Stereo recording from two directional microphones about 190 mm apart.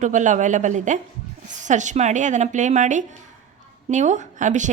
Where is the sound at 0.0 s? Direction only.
40° right (ahead or behind).